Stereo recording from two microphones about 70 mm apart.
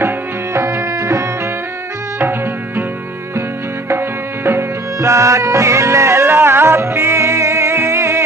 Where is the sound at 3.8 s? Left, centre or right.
Right.